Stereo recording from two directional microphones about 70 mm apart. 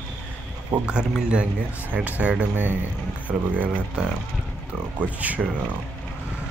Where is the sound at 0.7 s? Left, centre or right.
Right.